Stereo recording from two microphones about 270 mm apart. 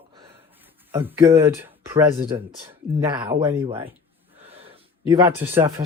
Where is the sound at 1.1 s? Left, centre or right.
Centre.